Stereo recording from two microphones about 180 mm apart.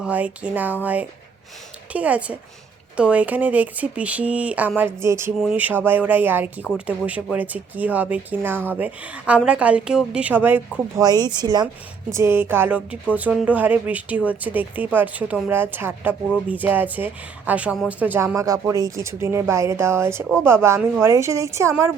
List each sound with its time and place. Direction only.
0.0 s speech: 10° right (ahead or behind)
11.0 s speech: 20° right (ahead or behind)